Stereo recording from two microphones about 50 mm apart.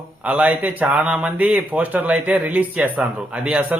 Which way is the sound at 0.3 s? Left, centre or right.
Right.